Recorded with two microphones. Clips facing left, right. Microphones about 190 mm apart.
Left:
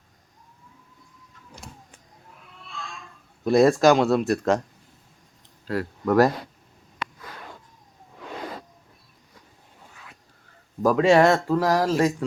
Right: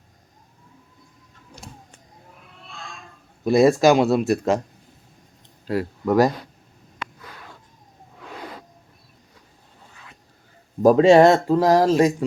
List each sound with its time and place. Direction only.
3.4 s speech: 5° right (ahead or behind)
5.6 s speech: 15° right (ahead or behind)
10.8 s speech: 25° right (ahead or behind)